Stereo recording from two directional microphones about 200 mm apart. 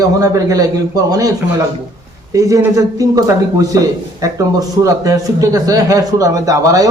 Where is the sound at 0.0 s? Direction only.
15° right (ahead or behind).